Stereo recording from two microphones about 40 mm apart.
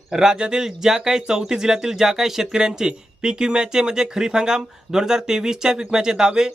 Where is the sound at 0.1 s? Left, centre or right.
Centre.